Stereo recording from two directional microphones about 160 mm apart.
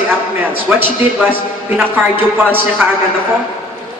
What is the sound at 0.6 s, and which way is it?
Speech, 10° right (ahead or behind).